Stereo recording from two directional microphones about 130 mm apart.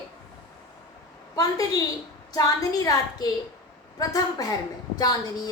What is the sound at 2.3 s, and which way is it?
A woman's voice, 30° left (ahead or behind).